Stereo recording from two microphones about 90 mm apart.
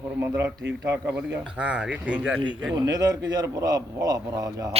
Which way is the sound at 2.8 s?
45° right (ahead or behind).